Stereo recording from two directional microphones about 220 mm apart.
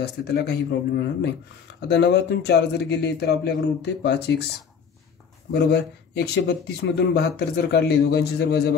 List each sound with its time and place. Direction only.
0.0 s speech: 50° left (ahead or behind)
5.5 s speech: 50° left (ahead or behind)